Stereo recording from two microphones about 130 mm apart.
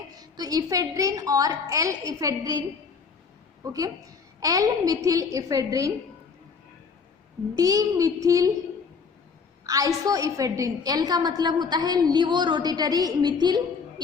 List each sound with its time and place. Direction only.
0.2 s a woman's voice: 30° right (ahead or behind)
7.5 s a woman's voice: 30° right (ahead or behind)
9.6 s a woman's voice: 25° right (ahead or behind)